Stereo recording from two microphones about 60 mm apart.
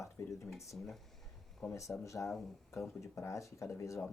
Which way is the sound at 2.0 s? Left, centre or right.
Left.